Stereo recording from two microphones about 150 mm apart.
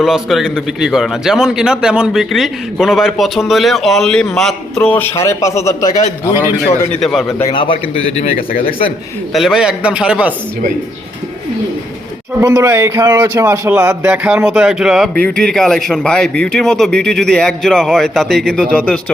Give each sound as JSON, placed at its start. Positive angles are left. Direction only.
{"t": 0.0, "sound": "a man's voice", "side_deg": 0}
{"t": 7.0, "sound": "a man's voice", "side_deg": 0}
{"t": 7.4, "sound": "a man's voice", "side_deg": 35}
{"t": 9.3, "sound": "a man's voice", "side_deg": 0}
{"t": 12.4, "sound": "a man's voice", "side_deg": -20}